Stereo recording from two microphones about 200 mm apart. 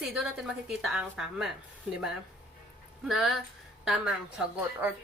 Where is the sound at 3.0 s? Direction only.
Centre (ahead or behind).